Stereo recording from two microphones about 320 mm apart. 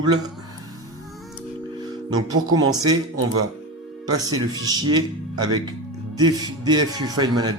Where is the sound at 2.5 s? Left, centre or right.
Centre.